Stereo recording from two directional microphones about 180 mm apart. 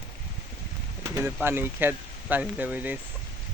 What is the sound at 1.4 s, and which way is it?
Speech, 10° right (ahead or behind).